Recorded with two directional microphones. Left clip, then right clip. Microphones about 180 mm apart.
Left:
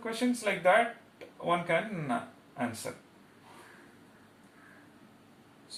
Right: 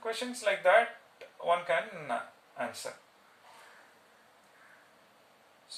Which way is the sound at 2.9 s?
15° right (ahead or behind).